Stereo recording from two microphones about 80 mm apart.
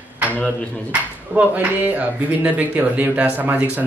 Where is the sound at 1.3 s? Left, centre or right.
Right.